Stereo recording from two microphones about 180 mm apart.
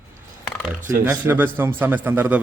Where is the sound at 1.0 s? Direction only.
10° right (ahead or behind).